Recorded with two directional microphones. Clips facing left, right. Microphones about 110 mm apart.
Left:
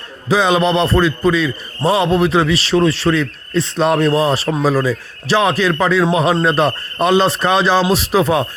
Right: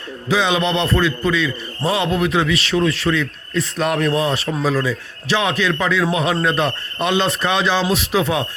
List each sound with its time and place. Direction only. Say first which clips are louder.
0.3 s a man's voice: left 4 dB; 40° left (ahead or behind)